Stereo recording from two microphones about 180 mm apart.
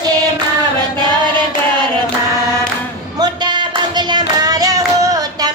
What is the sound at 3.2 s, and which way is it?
Clapping, 25° right (ahead or behind).